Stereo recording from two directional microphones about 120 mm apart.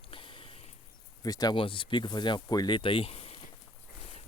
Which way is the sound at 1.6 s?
45° left (ahead or behind).